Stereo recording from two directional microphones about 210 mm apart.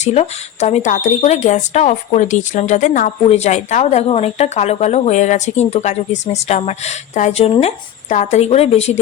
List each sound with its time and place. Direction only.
0.0 s speech: 30° left (ahead or behind)